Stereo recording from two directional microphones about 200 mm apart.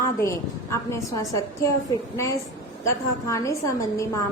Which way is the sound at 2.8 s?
15° left (ahead or behind).